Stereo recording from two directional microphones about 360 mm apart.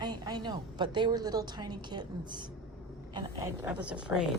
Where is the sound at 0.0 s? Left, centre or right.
Centre.